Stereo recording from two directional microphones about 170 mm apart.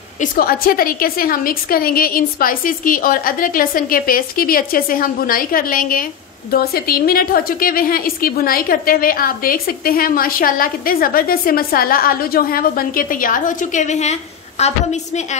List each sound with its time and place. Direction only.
0.2 s a woman's voice: 60° left (ahead or behind); by 15.2 s 40° left (ahead or behind)